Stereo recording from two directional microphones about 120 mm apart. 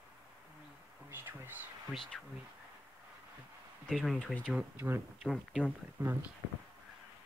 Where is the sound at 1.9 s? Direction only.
5° left (ahead or behind).